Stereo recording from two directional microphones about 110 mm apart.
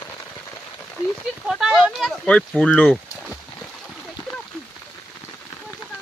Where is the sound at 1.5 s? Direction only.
5° right (ahead or behind).